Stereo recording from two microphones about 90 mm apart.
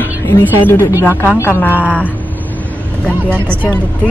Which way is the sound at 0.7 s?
25° left (ahead or behind).